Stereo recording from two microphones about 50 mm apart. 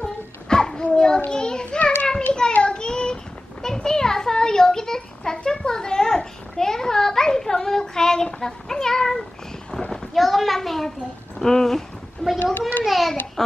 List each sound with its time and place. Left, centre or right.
0.0 s a sound: centre
1.3 s children playing: centre
1.8 s children playing: left
2.5 s child singing: centre
3.6 s children playing: centre
8.4 s speech: centre
9.7 s a sound: centre
9.9 s a child's voice: centre
11.3 s a sound: centre
12.8 s a child's voice: centre